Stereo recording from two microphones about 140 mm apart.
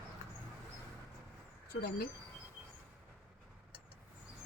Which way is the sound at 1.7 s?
90° left.